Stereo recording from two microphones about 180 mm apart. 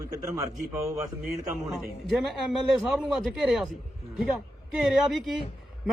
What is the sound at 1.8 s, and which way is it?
A man's voice, centre (ahead or behind).